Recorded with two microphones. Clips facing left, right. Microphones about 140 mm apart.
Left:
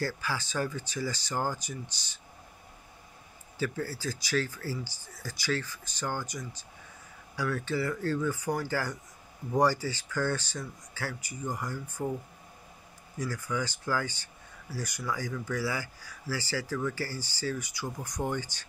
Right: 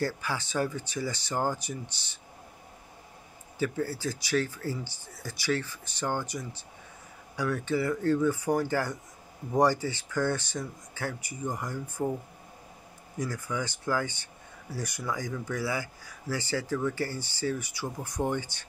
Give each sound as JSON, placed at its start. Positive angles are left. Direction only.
{"t": 0.0, "sound": "speech", "side_deg": -20}
{"t": 3.5, "sound": "speech", "side_deg": -20}
{"t": 13.2, "sound": "speech", "side_deg": -20}